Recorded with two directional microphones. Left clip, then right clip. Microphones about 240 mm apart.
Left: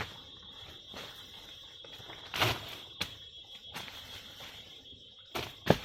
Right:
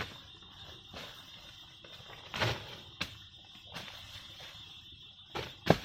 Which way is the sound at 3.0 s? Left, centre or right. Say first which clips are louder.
Left 1 dB; centre.